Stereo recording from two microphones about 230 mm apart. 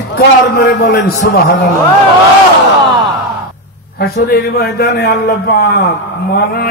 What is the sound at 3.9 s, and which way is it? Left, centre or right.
A man's voice, left.